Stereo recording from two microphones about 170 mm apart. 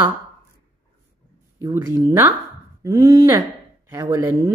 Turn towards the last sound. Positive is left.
turn(degrees=-15)  # may be behind; listen again after turning